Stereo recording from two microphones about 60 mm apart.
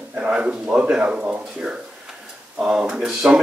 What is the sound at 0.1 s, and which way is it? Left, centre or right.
Speech, centre.